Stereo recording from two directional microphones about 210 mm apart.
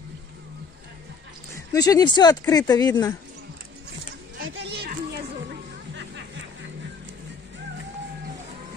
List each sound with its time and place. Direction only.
1.5 s speech: 15° left (ahead or behind)
4.4 s a sound: 50° right (ahead or behind)
5.5 s music: 60° right (ahead or behind)